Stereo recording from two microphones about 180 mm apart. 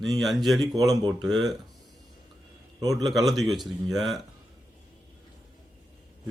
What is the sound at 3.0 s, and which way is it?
A man's voice, centre (ahead or behind).